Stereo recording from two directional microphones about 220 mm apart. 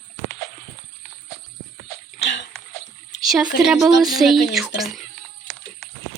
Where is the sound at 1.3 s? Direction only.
Centre (ahead or behind).